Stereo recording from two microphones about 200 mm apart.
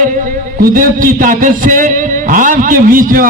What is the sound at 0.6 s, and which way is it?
A man's voice, 45° right (ahead or behind).